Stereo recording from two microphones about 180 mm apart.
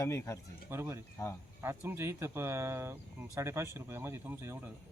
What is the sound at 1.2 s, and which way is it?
Speech, 20° left (ahead or behind).